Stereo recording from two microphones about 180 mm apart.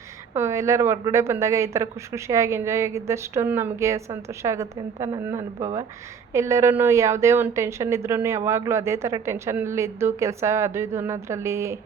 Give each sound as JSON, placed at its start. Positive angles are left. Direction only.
{"t": 0.3, "sound": "a woman's voice", "side_deg": -15}